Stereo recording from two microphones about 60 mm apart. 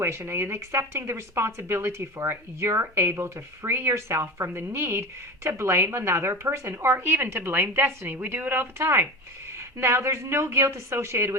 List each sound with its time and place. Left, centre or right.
0.2 s speech: right